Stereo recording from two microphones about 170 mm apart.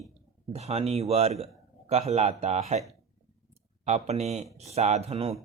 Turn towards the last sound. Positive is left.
turn(degrees=-35)  # may be behind; listen again after turning